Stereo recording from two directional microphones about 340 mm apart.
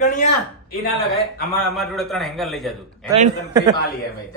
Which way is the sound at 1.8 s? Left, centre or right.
Centre.